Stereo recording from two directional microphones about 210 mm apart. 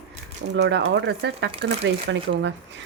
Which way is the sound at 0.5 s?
55° right (ahead or behind).